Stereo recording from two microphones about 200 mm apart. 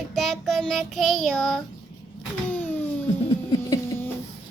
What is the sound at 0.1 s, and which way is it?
Child singing, centre (ahead or behind).